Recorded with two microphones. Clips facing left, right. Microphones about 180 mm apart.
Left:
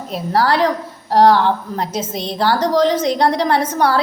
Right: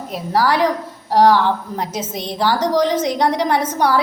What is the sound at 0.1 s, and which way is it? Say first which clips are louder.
A woman's voice: left 1 dB; 15° right (ahead or behind).